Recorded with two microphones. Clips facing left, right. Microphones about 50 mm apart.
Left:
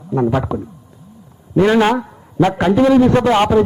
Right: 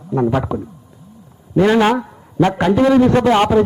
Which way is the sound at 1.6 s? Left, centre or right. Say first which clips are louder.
Even; centre.